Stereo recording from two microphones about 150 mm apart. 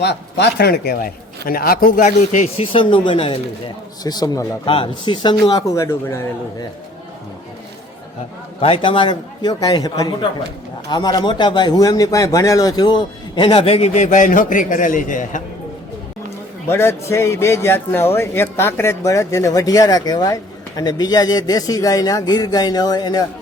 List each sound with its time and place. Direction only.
0.6 s a man's voice: 90° left; by 2.5 s 55° left (ahead or behind)
2.6 s a man's voice: 35° left (ahead or behind); by 6.7 s 15° left (ahead or behind)
8.6 s a man's voice: 40° left (ahead or behind); by 15.4 s 60° left (ahead or behind)
16.6 s speech: 15° left (ahead or behind)